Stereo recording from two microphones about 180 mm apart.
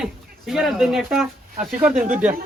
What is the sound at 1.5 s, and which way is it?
Speech, 50° right (ahead or behind).